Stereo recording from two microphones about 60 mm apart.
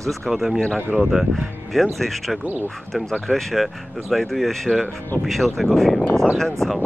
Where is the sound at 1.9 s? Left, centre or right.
Centre.